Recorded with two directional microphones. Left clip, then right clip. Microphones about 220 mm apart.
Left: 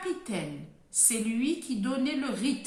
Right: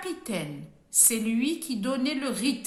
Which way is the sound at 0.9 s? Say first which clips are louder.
Right 3 dB; 50° right (ahead or behind).